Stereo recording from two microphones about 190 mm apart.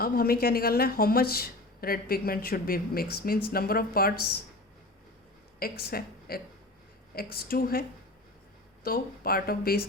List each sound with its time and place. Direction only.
0.0 s speech: 50° left (ahead or behind)
5.5 s speech: 50° left (ahead or behind)